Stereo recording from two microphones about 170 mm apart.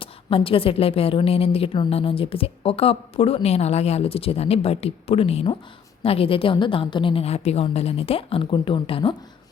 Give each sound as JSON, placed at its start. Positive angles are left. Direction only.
{"t": 0.0, "sound": "a woman's voice", "side_deg": 30}